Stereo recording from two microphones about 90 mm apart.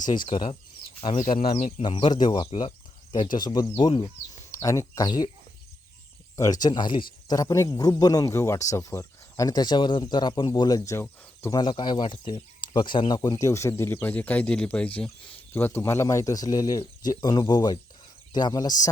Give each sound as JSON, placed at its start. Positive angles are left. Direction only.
{"t": 0.3, "sound": "speech", "side_deg": 70}
{"t": 2.6, "sound": "speech", "side_deg": 60}
{"t": 4.5, "sound": "speech", "side_deg": 35}
{"t": 6.3, "sound": "speech", "side_deg": 40}
{"t": 7.3, "sound": "speech", "side_deg": 40}
{"t": 10.9, "sound": "speech", "side_deg": 25}
{"t": 11.5, "sound": "speech", "side_deg": 55}
{"t": 13.4, "sound": "speech", "side_deg": 35}
{"t": 17.2, "sound": "speech", "side_deg": 55}